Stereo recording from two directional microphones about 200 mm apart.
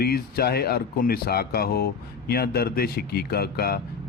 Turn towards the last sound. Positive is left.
turn(degrees=50)  # may be behind; listen again after turning